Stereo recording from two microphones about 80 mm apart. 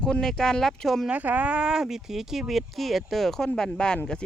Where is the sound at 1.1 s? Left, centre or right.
Centre.